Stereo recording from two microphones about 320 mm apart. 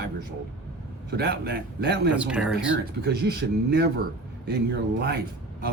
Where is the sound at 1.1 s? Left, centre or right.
Right.